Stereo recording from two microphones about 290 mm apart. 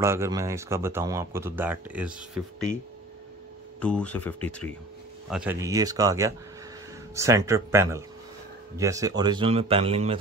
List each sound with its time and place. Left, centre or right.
0.0 s speech: centre
3.8 s speech: centre